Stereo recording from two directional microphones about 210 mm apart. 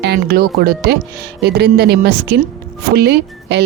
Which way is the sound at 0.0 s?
50° right (ahead or behind).